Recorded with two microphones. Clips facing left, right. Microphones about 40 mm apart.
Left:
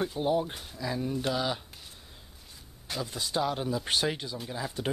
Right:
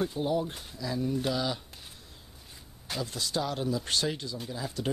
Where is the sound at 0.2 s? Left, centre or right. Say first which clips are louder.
Left 2 dB; left.